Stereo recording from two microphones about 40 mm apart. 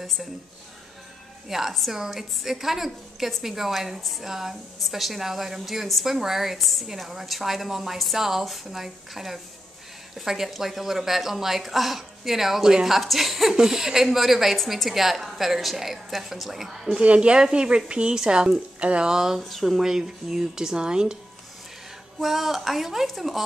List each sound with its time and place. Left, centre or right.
1.5 s a woman's voice: centre
17.0 s speech: right
18.8 s speech: right
19.0 s a woman's voice: centre
19.4 s a woman's voice: centre; by 21.2 s right
22.2 s a woman's voice: centre